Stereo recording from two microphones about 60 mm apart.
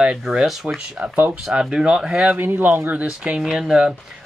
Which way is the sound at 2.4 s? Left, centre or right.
Right.